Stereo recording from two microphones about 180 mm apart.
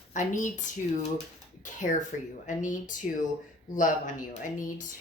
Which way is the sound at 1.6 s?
45° left (ahead or behind).